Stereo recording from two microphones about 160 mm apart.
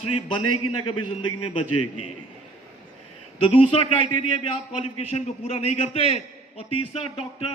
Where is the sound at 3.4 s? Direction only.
35° left (ahead or behind).